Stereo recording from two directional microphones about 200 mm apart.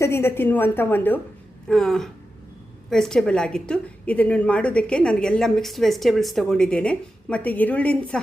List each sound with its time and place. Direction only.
0.0 s a woman's voice: 10° left (ahead or behind)